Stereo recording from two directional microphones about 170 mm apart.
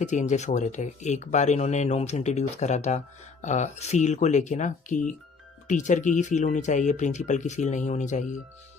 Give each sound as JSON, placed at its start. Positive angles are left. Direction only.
{"t": 0.0, "sound": "speech", "side_deg": 45}